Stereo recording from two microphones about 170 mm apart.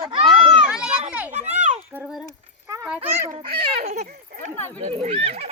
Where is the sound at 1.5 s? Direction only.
45° right (ahead or behind).